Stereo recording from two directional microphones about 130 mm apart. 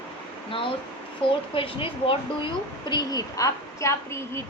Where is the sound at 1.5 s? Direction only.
45° left (ahead or behind).